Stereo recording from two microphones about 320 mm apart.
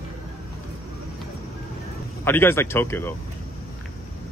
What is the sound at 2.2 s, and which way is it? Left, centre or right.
Speech, centre.